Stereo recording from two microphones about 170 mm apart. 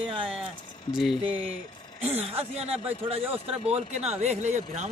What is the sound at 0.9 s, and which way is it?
Speech, centre (ahead or behind).